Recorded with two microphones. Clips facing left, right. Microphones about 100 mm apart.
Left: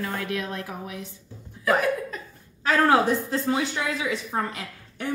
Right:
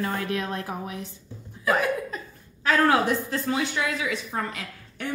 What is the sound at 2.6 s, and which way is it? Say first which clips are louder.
Speech: left 1 dB; 25° left (ahead or behind).